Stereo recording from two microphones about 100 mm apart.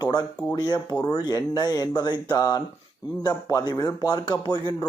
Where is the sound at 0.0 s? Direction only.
45° left (ahead or behind).